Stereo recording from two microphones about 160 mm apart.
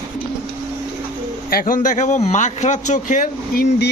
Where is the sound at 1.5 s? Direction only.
65° left (ahead or behind).